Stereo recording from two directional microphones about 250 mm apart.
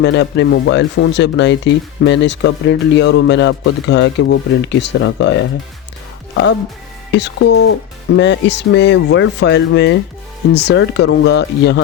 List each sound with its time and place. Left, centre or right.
0.0 s speech: left
7.1 s speech: left